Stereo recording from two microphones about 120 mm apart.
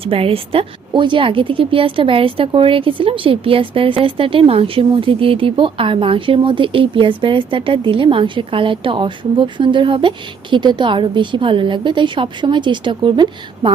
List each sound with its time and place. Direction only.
0.0 s speech: 50° right (ahead or behind)